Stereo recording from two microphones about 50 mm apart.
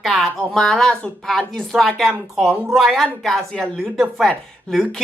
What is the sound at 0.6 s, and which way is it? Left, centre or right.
Speech, centre.